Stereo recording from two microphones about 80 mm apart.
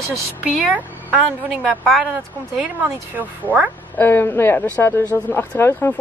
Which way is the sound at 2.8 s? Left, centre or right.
Right.